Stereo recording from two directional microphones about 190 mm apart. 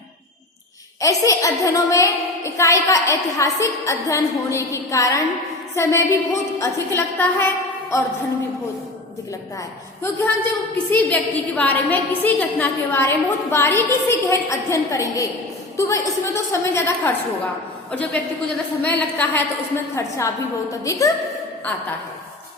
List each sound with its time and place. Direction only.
1.0 s a woman's voice: 15° left (ahead or behind)
10.0 s a woman's voice: 10° left (ahead or behind)